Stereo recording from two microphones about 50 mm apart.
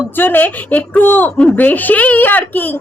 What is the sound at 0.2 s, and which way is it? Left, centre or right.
A woman's voice, left.